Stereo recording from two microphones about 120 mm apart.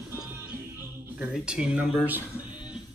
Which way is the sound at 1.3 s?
5° right (ahead or behind).